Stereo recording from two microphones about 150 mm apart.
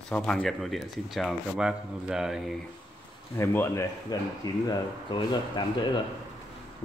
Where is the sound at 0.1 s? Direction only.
5° left (ahead or behind).